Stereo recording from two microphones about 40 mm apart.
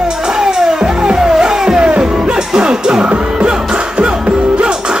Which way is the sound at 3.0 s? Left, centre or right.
Right.